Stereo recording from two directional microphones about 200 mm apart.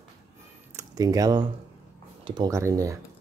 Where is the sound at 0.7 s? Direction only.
20° right (ahead or behind).